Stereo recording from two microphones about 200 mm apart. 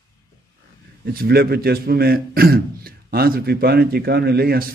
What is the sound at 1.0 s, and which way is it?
A man's voice, 50° right (ahead or behind).